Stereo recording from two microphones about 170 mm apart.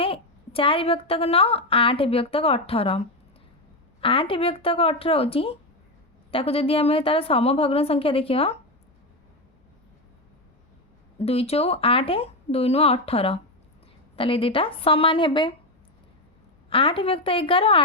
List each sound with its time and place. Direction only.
0.0 s a woman's voice: 35° left (ahead or behind)
4.0 s a woman's voice: 30° left (ahead or behind)
11.2 s a woman's voice: 35° left (ahead or behind)
16.6 s a woman's voice: 30° left (ahead or behind)